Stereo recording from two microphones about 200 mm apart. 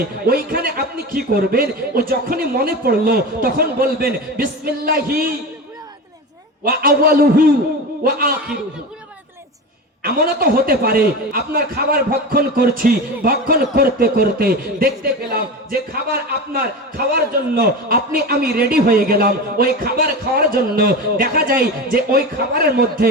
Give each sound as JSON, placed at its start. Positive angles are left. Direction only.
{"t": 0.3, "sound": "a man's voice", "side_deg": -45}
{"t": 6.7, "sound": "a man's voice", "side_deg": -50}
{"t": 10.0, "sound": "a man's voice", "side_deg": -50}